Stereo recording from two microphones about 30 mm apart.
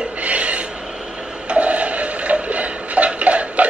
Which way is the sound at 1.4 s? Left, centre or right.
Right.